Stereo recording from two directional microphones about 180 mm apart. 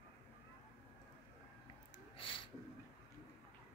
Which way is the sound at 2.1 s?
30° left (ahead or behind).